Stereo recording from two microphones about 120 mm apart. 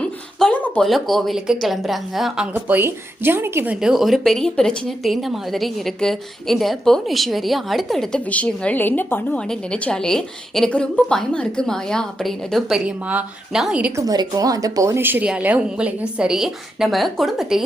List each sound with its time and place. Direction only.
0.3 s speech: 10° left (ahead or behind)
2.6 s speech: 20° right (ahead or behind)
3.8 s speech: 5° right (ahead or behind)
13.9 s speech: 30° right (ahead or behind); by 17.6 s centre (ahead or behind)